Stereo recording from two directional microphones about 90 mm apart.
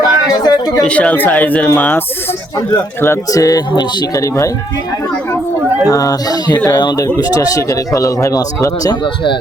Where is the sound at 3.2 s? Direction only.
40° left (ahead or behind).